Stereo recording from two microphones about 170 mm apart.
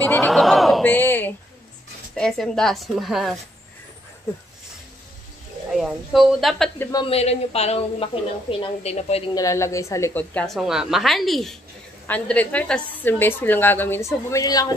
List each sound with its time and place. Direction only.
0.0 s a sound: 5° left (ahead or behind)
0.8 s a sound: 10° left (ahead or behind)
2.1 s a woman's voice: 5° left (ahead or behind)
5.7 s a woman's voice: centre (ahead or behind)
6.8 s a man's voice: 20° left (ahead or behind)
7.1 s a woman's voice: 40° left (ahead or behind)
9.3 s a woman's voice: 20° left (ahead or behind)